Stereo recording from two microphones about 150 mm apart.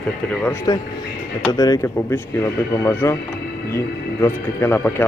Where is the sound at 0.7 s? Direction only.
25° left (ahead or behind).